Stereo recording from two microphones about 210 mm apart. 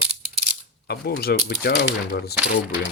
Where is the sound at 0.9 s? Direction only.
50° left (ahead or behind).